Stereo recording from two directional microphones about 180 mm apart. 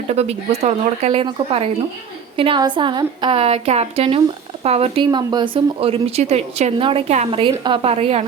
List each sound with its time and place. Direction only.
0.1 s a woman's voice: 35° right (ahead or behind)